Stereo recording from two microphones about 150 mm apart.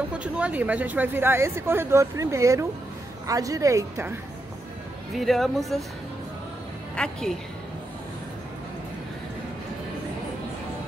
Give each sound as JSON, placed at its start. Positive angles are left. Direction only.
{"t": 0.1, "sound": "a woman's voice", "side_deg": -10}
{"t": 5.1, "sound": "speech", "side_deg": 0}
{"t": 7.0, "sound": "speech", "side_deg": 5}